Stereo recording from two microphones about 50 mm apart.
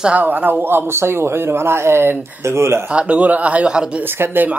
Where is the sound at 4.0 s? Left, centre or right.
Right.